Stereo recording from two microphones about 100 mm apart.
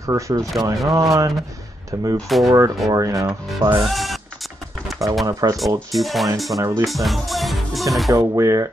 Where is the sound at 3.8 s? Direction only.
Centre (ahead or behind).